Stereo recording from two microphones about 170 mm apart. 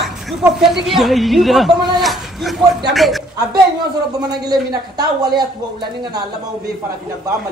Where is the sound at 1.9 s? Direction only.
Centre (ahead or behind).